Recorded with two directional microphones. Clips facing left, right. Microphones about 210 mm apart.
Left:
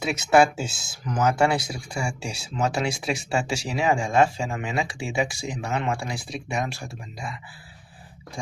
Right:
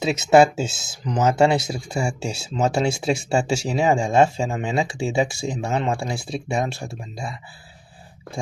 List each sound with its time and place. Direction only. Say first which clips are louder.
0.0 s speech: right 4 dB; 25° right (ahead or behind)